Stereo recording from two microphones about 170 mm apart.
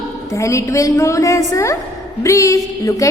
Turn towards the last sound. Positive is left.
turn(degrees=20)  # may be behind; listen again after turning